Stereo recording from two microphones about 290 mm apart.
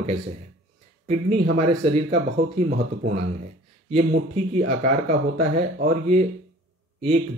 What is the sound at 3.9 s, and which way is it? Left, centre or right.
Speech, right.